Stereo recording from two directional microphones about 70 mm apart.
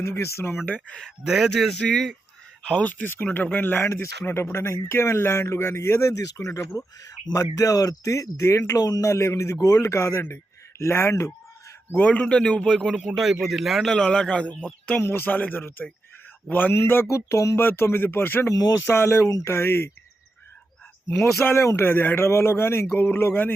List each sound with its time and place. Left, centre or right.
0.0 s speech: left
0.6 s speech: left
1.3 s a man's voice: centre
2.8 s speech: left
4.0 s speech: left
6.7 s speech: left
11.9 s a man's voice: left; by 13.0 s centre
13.0 s a man's voice: centre
13.9 s a man's voice: centre; by 17.6 s left
17.6 s speech: left
18.4 s speech: left
18.9 s speech: left
21.2 s speech: left